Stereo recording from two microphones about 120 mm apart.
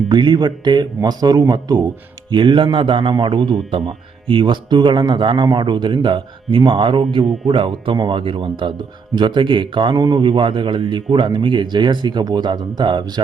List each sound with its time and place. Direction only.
0.1 s a man's voice: 40° right (ahead or behind)